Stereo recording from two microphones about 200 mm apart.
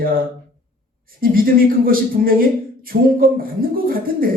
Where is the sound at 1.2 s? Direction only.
45° right (ahead or behind).